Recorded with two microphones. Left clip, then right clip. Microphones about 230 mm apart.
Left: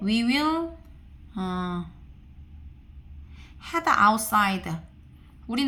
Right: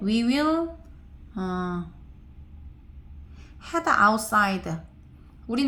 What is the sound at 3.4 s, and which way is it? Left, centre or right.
A woman's voice, left.